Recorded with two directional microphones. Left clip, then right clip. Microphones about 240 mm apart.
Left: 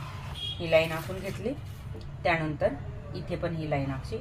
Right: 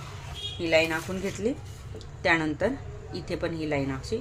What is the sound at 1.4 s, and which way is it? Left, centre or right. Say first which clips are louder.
A woman's voice: right 4 dB; right.